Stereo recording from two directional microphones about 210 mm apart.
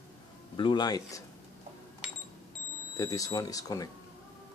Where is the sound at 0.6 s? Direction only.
20° left (ahead or behind).